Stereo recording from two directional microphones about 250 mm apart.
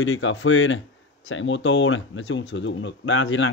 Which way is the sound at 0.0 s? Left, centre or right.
Left.